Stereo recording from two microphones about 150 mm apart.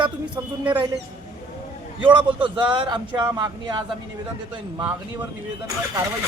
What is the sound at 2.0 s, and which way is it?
A man's voice, 35° right (ahead or behind).